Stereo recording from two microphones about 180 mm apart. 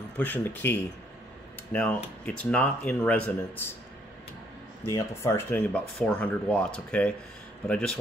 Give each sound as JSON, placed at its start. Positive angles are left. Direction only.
{"t": 0.2, "sound": "speech", "side_deg": 10}
{"t": 4.9, "sound": "speech", "side_deg": 15}